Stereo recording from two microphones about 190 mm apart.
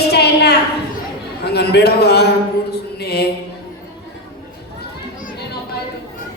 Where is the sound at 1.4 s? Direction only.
60° left (ahead or behind).